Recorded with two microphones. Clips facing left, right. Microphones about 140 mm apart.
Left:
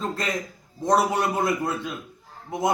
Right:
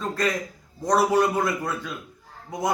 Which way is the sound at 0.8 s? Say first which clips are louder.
Right 1 dB; 25° left (ahead or behind).